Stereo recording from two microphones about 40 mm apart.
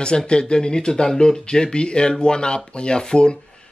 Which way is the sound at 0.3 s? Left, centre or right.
Left.